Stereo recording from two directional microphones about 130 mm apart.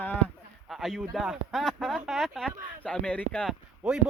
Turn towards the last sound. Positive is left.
turn(degrees=-5)  # may be behind; listen again after turning